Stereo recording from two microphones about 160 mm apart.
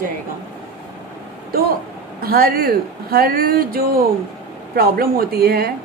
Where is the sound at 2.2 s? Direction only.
70° right (ahead or behind).